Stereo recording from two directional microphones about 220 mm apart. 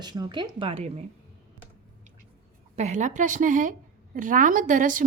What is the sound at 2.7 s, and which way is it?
A woman's voice, 30° right (ahead or behind).